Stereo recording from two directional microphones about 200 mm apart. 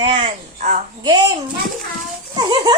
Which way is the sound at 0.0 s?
25° right (ahead or behind).